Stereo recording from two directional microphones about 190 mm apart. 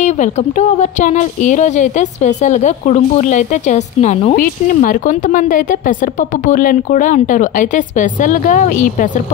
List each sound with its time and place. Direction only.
0.0 s a woman's voice: 40° left (ahead or behind)